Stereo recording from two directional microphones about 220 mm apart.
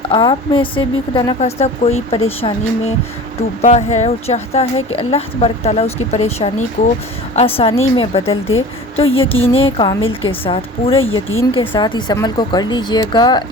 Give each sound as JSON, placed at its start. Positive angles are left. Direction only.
{"t": 0.1, "sound": "a woman's voice", "side_deg": 20}
{"t": 11.0, "sound": "speech", "side_deg": 65}
{"t": 11.5, "sound": "a woman's voice", "side_deg": 20}